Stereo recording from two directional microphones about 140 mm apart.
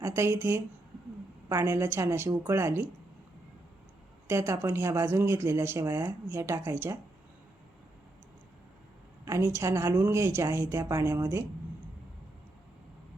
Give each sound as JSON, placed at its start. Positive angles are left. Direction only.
{"t": 0.0, "sound": "speech", "side_deg": -20}
{"t": 4.3, "sound": "speech", "side_deg": -20}
{"t": 9.2, "sound": "a woman's voice", "side_deg": -20}